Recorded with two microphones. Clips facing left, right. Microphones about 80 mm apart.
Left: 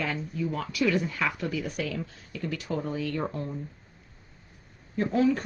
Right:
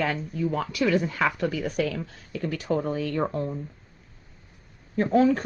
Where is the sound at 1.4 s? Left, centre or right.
Right.